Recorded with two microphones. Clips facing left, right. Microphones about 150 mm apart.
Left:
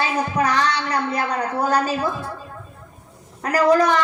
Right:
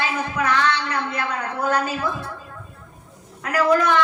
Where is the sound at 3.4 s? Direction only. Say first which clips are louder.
Left 3 dB; 35° left (ahead or behind).